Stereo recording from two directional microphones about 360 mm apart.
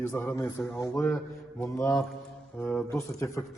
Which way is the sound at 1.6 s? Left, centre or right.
Centre.